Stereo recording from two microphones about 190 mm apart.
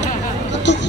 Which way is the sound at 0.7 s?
70° left (ahead or behind).